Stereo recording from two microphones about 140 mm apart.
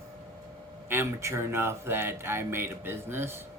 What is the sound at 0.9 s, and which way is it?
Speech, 15° right (ahead or behind).